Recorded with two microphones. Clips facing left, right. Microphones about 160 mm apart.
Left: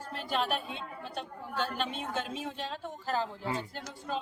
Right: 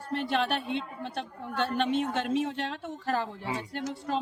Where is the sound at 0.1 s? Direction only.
65° right (ahead or behind).